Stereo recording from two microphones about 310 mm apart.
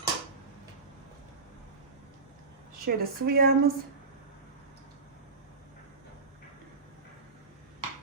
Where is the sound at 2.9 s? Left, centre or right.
Right.